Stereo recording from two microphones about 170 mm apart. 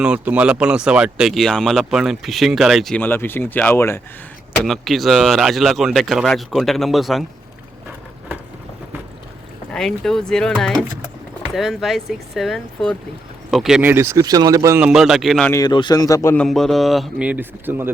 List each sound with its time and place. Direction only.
0.0 s speech: 5° right (ahead or behind); by 4.0 s 15° left (ahead or behind)
4.6 s speech: centre (ahead or behind)
9.7 s speech: centre (ahead or behind); by 14.8 s 20° right (ahead or behind)
14.8 s speech: 5° right (ahead or behind)
15.4 s speech: 20° left (ahead or behind)
16.4 s speech: centre (ahead or behind)